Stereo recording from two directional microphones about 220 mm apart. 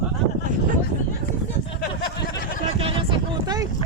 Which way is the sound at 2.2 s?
45° left (ahead or behind).